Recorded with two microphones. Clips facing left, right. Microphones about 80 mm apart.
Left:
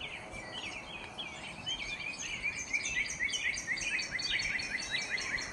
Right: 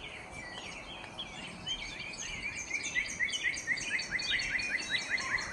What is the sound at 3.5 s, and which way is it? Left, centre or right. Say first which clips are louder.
Bird vocalization: right 2 dB; right.